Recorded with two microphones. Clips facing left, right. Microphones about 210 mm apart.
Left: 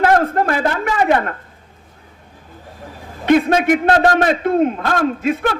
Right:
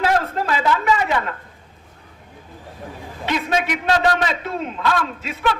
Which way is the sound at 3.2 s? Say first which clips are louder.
Left 9 dB; 55° left (ahead or behind).